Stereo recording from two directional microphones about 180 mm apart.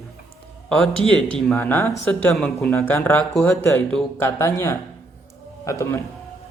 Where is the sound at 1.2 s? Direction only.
Centre (ahead or behind).